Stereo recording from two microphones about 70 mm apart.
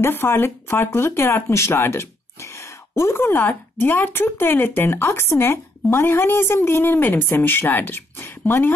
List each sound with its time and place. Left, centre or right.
0.0 s speech: left